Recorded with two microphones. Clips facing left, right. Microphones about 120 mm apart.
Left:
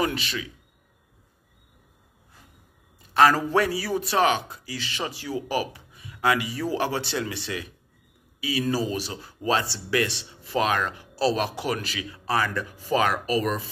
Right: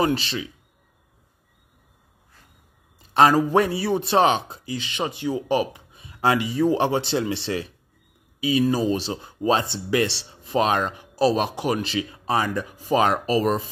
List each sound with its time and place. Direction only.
0.0 s speech: 30° right (ahead or behind)
3.0 s speech: 20° right (ahead or behind)